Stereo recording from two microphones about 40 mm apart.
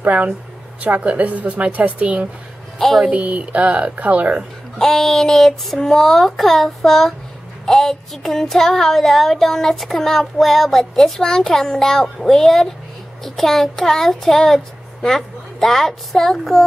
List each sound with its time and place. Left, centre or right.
0.8 s a woman's voice: right
4.7 s child singing: centre